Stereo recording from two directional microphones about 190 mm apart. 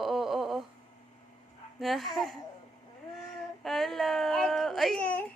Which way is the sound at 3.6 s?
Centre (ahead or behind).